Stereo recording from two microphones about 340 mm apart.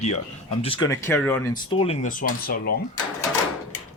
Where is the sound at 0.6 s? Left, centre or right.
Centre.